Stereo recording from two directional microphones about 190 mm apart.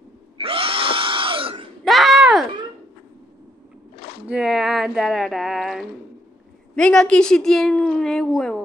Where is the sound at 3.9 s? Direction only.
55° left (ahead or behind).